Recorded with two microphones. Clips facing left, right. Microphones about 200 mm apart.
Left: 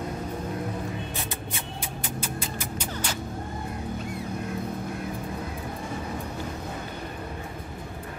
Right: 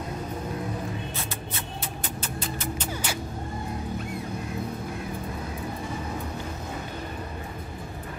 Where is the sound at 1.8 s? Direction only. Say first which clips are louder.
Left 1 dB; 10° left (ahead or behind).